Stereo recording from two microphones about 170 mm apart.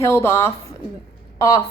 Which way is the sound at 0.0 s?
15° left (ahead or behind).